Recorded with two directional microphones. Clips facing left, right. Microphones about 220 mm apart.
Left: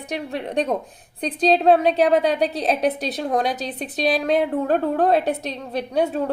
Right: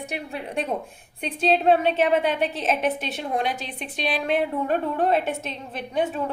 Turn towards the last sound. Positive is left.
turn(degrees=35)  # may be behind; listen again after turning